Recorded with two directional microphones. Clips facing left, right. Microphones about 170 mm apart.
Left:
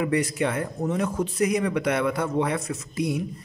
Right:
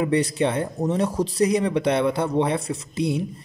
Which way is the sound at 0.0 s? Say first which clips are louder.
Right 3 dB; 30° right (ahead or behind).